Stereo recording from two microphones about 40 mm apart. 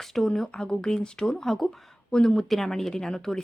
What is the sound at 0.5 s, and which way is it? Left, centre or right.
A woman's voice, left.